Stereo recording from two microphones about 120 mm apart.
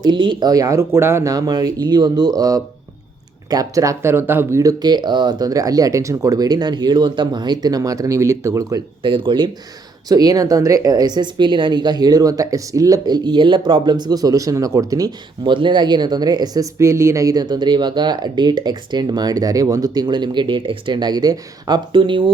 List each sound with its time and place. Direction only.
0.0 s speech: 40° right (ahead or behind); by 4.6 s 20° right (ahead or behind)
4.6 s speech: 35° right (ahead or behind)
9.0 s speech: 45° right (ahead or behind)
10.1 s speech: 30° right (ahead or behind)
15.4 s speech: 40° right (ahead or behind)
16.7 s speech: 25° right (ahead or behind); by 22.3 s 45° right (ahead or behind)